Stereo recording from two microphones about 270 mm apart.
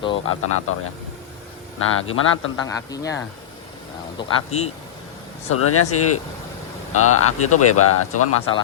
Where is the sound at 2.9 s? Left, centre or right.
Centre.